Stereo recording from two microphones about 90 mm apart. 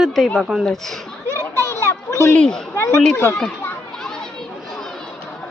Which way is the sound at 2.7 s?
35° left (ahead or behind).